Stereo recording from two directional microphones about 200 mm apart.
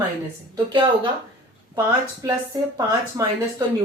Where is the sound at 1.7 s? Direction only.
15° right (ahead or behind).